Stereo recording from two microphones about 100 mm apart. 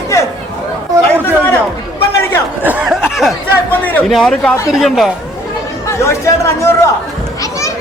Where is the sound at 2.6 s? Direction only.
10° right (ahead or behind).